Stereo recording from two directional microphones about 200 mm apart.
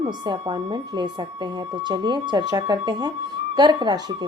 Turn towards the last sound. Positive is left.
turn(degrees=-20)  # may be behind; listen again after turning